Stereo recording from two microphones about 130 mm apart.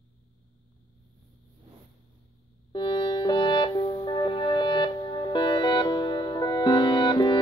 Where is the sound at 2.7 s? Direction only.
40° left (ahead or behind).